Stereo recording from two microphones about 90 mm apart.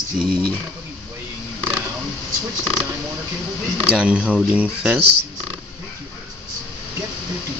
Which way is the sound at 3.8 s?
15° right (ahead or behind).